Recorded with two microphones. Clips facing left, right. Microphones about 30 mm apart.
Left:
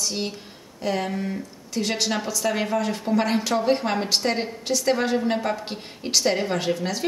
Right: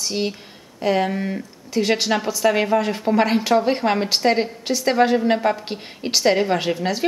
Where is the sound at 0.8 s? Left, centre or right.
Centre.